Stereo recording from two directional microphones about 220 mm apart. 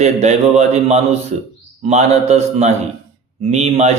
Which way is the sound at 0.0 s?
30° right (ahead or behind).